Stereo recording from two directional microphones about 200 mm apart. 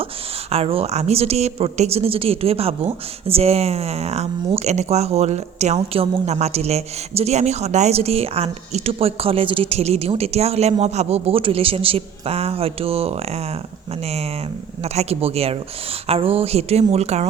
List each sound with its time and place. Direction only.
0.5 s speech: 30° right (ahead or behind)
14.9 s speech: 30° right (ahead or behind)